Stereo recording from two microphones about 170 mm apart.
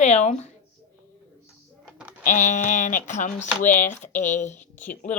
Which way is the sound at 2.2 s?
50° left (ahead or behind).